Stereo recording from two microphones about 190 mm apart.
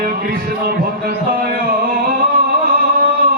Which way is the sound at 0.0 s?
50° right (ahead or behind).